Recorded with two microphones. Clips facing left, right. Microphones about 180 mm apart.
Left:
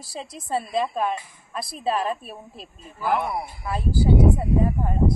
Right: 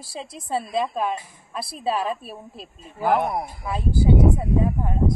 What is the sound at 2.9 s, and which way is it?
Speech, 50° right (ahead or behind).